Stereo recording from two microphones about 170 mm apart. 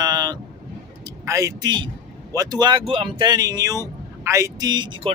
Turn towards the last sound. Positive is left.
turn(degrees=-25)  # may be behind; listen again after turning